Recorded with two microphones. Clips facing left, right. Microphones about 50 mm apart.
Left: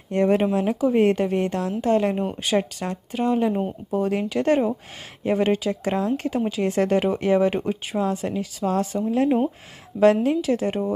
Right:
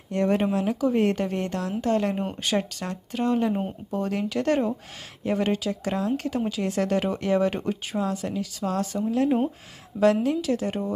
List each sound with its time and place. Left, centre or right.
0.1 s speech: left